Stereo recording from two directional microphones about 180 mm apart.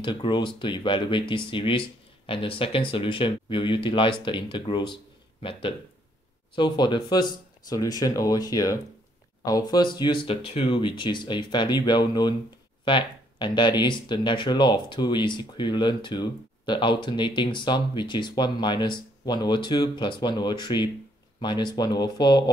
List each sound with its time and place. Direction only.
0.0 s speech: 25° left (ahead or behind)